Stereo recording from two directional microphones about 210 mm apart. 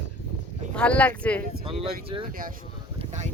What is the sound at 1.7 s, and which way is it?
Speech, 25° right (ahead or behind).